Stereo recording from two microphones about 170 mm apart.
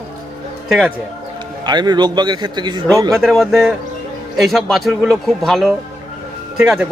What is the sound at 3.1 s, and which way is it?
A man's voice, centre (ahead or behind).